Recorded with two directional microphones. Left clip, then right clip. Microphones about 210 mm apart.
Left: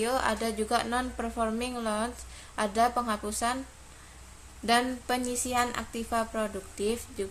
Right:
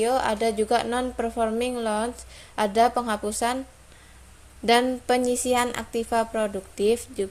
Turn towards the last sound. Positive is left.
turn(degrees=-30)  # may be behind; listen again after turning